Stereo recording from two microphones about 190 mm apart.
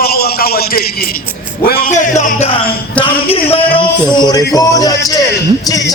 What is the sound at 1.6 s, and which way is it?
Music, 50° left (ahead or behind).